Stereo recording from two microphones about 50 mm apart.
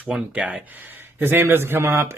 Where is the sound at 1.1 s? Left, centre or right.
Right.